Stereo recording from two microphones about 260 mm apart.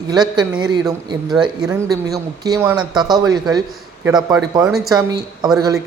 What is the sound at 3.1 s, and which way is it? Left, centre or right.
Speech, centre.